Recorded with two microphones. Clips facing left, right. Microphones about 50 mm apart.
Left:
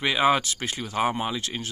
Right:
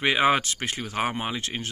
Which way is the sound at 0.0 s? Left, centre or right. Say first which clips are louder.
Even; right.